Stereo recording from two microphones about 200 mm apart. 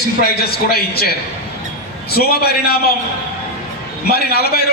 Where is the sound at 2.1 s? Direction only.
50° left (ahead or behind).